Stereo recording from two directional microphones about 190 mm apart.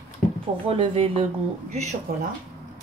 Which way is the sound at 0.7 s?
30° right (ahead or behind).